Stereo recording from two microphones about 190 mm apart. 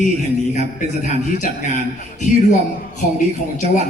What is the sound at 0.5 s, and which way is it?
A woman's voice, 40° left (ahead or behind).